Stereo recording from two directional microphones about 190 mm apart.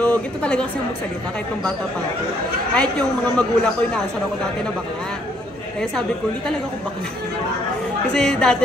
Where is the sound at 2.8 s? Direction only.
5° left (ahead or behind).